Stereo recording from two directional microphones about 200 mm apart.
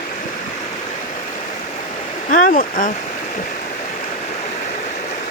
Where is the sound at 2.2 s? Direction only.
40° left (ahead or behind).